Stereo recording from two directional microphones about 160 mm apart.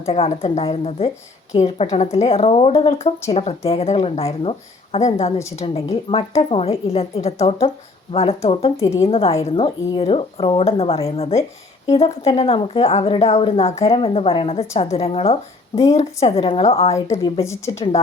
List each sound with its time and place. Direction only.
0.0 s a woman's voice: 40° left (ahead or behind)
16.9 s a woman's voice: 20° left (ahead or behind)